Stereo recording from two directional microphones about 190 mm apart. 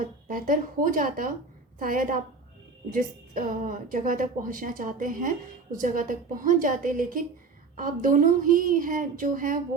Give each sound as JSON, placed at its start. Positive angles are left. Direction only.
{"t": 0.0, "sound": "a woman's voice", "side_deg": -45}